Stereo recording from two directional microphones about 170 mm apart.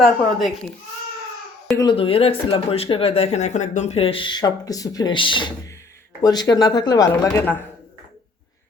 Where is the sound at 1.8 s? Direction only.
30° left (ahead or behind); by 7.6 s 10° left (ahead or behind).